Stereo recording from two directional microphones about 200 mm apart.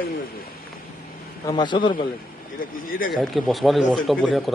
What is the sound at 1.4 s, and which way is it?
Speech, 20° left (ahead or behind).